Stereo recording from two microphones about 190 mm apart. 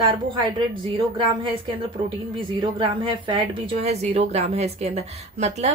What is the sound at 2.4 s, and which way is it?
A woman's voice, 25° right (ahead or behind).